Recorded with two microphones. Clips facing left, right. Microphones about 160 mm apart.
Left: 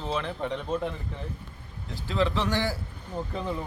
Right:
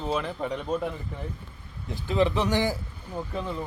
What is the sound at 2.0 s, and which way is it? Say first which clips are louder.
Speech: right 3 dB; 15° right (ahead or behind).